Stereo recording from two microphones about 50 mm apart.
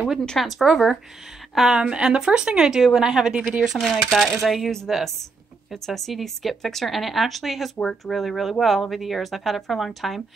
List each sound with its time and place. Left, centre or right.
0.4 s speech: centre
1.5 s a woman's voice: centre
7.7 s speech: centre
8.1 s speech: centre